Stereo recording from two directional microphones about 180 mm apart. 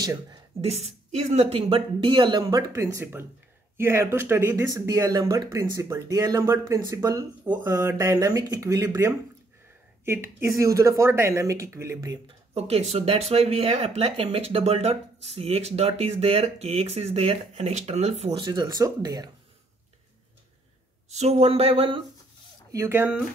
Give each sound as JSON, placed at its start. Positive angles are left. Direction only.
{"t": 0.0, "sound": "speech", "side_deg": -20}
{"t": 0.6, "sound": "speech", "side_deg": -35}
{"t": 12.5, "sound": "speech", "side_deg": -35}
{"t": 18.4, "sound": "speech", "side_deg": -25}
{"t": 21.1, "sound": "speech", "side_deg": -35}
{"t": 22.7, "sound": "speech", "side_deg": -15}